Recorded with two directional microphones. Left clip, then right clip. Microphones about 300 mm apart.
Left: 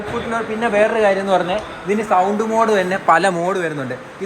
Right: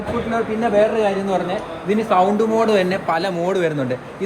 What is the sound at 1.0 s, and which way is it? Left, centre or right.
Speech, left.